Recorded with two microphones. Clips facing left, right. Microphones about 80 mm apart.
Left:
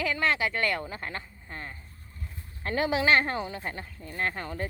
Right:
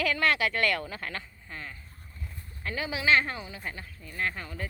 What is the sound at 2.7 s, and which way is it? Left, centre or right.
Speech, left.